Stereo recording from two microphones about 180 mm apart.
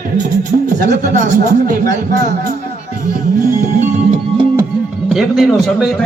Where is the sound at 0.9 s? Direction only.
45° right (ahead or behind).